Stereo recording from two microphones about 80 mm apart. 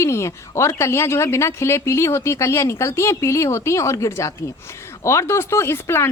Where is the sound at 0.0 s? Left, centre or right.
Left.